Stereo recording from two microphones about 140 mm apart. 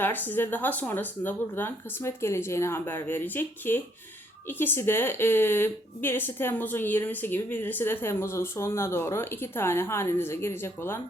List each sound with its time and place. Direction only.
0.0 s a woman's voice: 15° left (ahead or behind)